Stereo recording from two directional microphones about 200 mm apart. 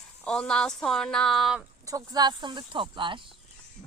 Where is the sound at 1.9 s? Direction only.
20° right (ahead or behind).